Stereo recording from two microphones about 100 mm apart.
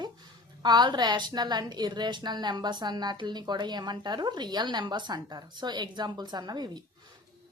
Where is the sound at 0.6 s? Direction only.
45° right (ahead or behind).